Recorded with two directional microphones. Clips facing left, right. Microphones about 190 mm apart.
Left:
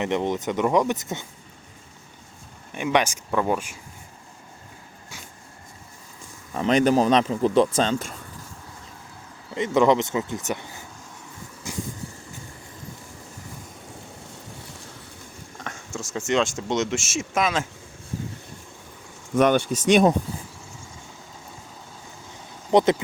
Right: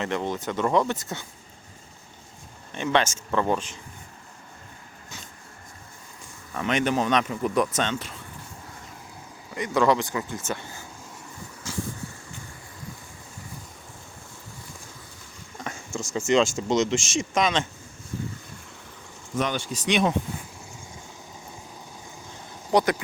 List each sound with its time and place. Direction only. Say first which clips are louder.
0.0 s speech: left 4 dB; 20° left (ahead or behind)
2.7 s speech: left 1 dB; 15° left (ahead or behind)
6.5 s speech: left 6 dB; 30° left (ahead or behind)
9.6 s speech: left 3 dB; 20° left (ahead or behind)
15.6 s speech: right 2 dB; centre (ahead or behind)
19.4 s speech: left 9 dB; 55° left (ahead or behind)
22.7 s speech: left 4 dB; 25° left (ahead or behind)